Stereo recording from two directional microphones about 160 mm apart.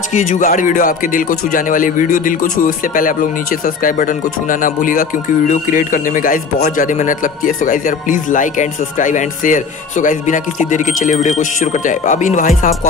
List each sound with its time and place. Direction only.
0.1 s a man's voice: 50° left (ahead or behind)